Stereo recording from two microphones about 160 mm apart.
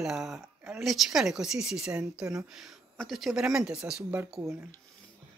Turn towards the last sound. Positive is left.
turn(degrees=0)  # may be behind; listen again after turning